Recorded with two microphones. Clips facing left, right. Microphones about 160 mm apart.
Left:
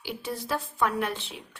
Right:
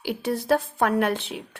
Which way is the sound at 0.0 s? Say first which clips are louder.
Right 7 dB; 60° right (ahead or behind).